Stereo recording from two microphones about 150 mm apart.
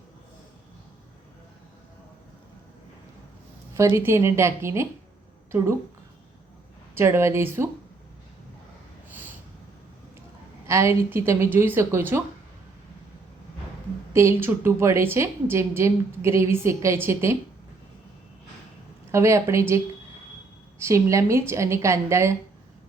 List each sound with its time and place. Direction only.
3.8 s a woman's voice: 20° right (ahead or behind)
6.9 s a woman's voice: 15° right (ahead or behind)
10.7 s a woman's voice: 20° right (ahead or behind)
14.1 s a woman's voice: 20° right (ahead or behind)
19.1 s a woman's voice: 20° right (ahead or behind)